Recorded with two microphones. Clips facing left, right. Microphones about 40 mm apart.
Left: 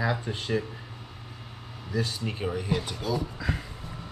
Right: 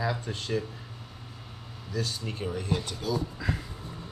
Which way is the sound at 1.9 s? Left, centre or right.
Centre.